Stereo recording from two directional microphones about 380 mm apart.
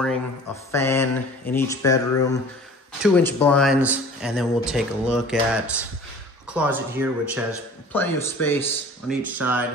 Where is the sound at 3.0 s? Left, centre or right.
Centre.